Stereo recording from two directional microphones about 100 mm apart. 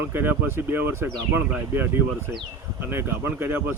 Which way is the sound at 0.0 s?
20° right (ahead or behind).